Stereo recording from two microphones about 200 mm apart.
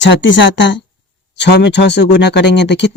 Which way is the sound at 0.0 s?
60° left (ahead or behind).